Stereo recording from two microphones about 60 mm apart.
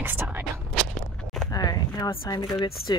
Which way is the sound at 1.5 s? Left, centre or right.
Left.